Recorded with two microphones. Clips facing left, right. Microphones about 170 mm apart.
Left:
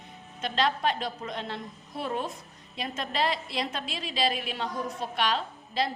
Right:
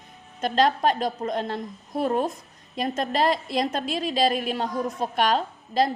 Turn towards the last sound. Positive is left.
turn(degrees=-45)  # may be behind; listen again after turning